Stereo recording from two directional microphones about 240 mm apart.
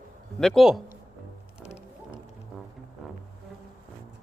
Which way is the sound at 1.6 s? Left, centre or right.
Left.